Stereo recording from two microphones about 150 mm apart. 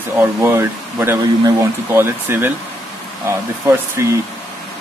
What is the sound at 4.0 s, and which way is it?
Speech, 20° right (ahead or behind).